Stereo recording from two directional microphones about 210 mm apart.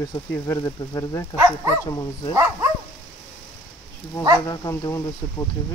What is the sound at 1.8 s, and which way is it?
Speech, 15° left (ahead or behind).